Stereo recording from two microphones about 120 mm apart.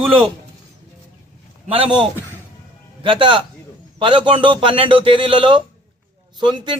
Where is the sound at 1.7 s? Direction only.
45° right (ahead or behind).